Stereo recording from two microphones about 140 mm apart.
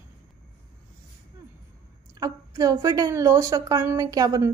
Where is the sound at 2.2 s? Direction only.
25° right (ahead or behind).